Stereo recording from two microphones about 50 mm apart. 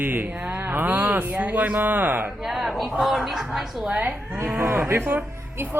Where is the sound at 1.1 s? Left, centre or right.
Right.